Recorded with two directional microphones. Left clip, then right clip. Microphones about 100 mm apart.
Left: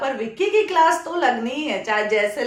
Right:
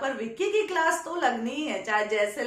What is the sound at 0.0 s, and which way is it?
A woman's voice, 20° left (ahead or behind).